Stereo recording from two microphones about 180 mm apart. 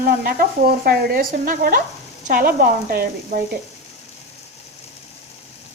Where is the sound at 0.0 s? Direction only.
55° right (ahead or behind).